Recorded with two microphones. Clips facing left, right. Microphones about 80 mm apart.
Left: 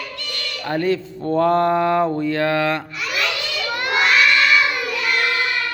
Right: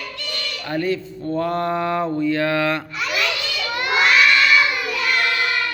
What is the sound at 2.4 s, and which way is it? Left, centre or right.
Speech, left.